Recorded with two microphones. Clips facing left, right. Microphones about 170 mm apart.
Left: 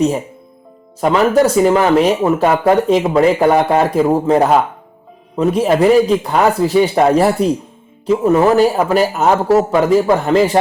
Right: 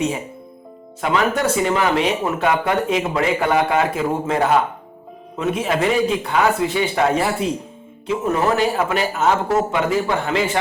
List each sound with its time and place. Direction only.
1.0 s speech: 35° left (ahead or behind)